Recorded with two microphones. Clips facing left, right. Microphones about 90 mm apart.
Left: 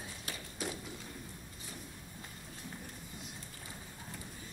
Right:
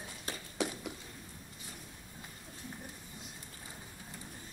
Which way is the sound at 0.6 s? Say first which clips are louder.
Right 5 dB; 70° right (ahead or behind).